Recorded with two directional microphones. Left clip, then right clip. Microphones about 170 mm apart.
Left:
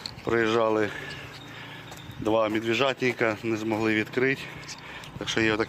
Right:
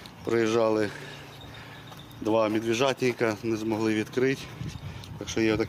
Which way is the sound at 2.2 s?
Centre (ahead or behind).